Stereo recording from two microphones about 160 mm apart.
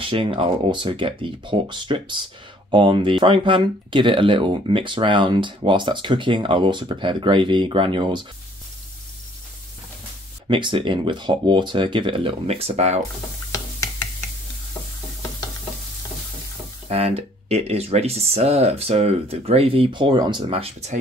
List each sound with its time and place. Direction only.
0.0 s speech: 35° right (ahead or behind)
10.5 s speech: 30° right (ahead or behind)
13.5 s a sound: 20° left (ahead or behind)
16.9 s speech: 40° right (ahead or behind)